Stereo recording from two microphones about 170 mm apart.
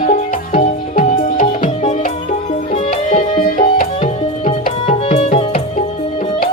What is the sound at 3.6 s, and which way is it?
Tabla, 50° left (ahead or behind).